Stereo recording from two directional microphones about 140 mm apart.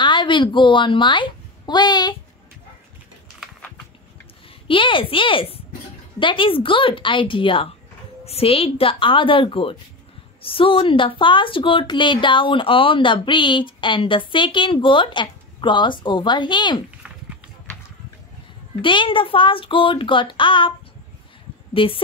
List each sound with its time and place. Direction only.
0.0 s a woman's voice: 35° left (ahead or behind)
4.6 s a woman's voice: 40° left (ahead or behind)
18.8 s a woman's voice: 35° left (ahead or behind)
21.7 s a woman's voice: 40° left (ahead or behind)